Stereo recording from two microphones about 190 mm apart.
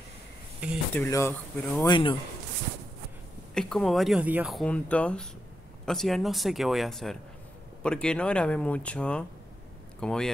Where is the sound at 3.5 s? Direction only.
Centre (ahead or behind).